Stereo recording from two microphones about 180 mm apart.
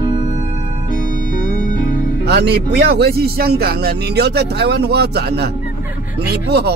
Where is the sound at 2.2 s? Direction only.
70° right (ahead or behind).